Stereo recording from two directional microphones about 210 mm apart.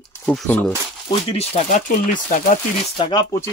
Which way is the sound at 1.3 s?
30° left (ahead or behind).